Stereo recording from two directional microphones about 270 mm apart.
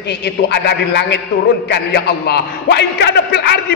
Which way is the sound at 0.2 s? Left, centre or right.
Left.